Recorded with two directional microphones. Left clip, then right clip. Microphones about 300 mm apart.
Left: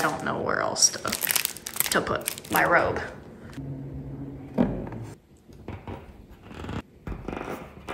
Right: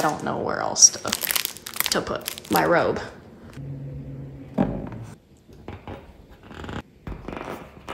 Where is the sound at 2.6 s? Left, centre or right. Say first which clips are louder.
Right 1 dB; right.